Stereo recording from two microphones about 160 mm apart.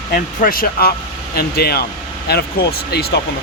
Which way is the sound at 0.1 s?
60° left (ahead or behind).